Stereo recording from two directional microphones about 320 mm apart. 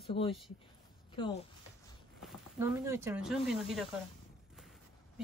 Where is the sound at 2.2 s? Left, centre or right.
Centre.